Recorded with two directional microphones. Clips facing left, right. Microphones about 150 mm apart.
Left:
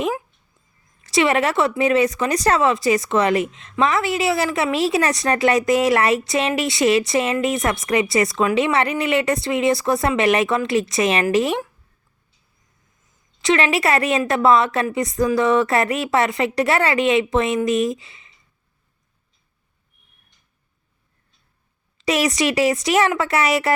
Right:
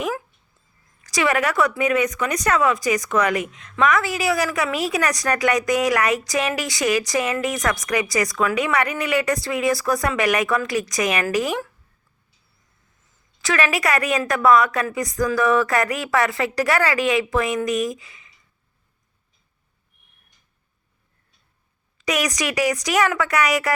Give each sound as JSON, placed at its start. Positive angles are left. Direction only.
{"t": 1.0, "sound": "speech", "side_deg": 25}
{"t": 13.4, "sound": "speech", "side_deg": 25}
{"t": 21.9, "sound": "speech", "side_deg": 25}